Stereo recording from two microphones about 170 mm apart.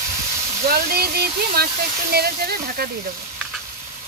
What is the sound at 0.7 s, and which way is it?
Speech, 60° right (ahead or behind).